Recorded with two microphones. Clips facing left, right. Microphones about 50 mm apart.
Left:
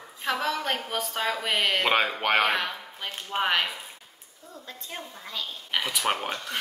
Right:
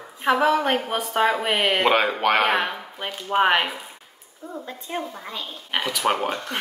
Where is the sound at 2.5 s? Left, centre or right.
Right.